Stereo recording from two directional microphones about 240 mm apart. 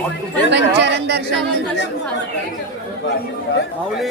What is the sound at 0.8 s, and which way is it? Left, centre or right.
Speech, right.